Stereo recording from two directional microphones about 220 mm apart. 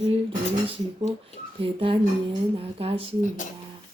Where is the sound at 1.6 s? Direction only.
25° right (ahead or behind).